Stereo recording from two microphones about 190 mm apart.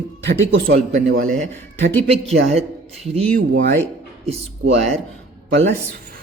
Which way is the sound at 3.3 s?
45° right (ahead or behind).